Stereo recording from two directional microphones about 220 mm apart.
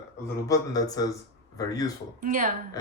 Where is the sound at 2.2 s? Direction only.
35° right (ahead or behind).